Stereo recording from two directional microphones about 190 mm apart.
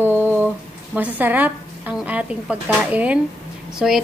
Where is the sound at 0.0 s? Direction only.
10° right (ahead or behind).